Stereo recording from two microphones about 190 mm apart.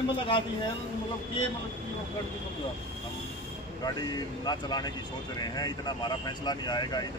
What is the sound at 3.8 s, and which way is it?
Speech, 20° left (ahead or behind).